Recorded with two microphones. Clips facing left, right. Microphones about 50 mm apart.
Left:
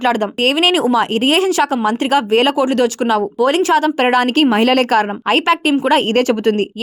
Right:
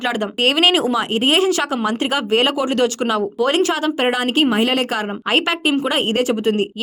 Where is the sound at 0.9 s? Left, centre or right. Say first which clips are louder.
Left 3 dB; left.